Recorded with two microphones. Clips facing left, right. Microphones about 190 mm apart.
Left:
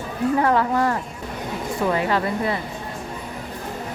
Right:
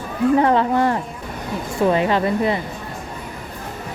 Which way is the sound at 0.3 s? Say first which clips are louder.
Right 2 dB; 25° right (ahead or behind).